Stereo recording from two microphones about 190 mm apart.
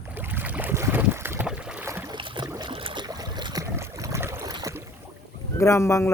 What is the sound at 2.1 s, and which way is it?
Boat, 25° right (ahead or behind).